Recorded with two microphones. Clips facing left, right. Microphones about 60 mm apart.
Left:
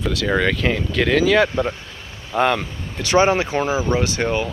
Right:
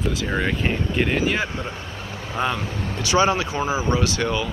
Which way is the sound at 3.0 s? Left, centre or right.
Left.